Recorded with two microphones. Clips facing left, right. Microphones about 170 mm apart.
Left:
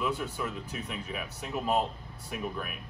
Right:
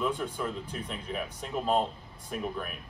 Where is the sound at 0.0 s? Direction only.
5° left (ahead or behind).